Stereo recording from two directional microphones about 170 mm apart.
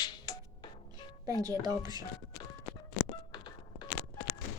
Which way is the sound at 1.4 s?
25° right (ahead or behind).